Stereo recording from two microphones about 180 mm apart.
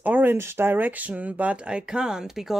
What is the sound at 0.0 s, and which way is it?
Speech, 10° right (ahead or behind).